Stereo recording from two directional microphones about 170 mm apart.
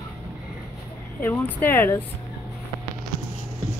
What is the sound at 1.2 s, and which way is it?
Speech, 10° left (ahead or behind).